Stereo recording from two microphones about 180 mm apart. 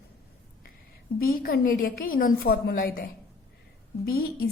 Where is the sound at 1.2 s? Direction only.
55° left (ahead or behind).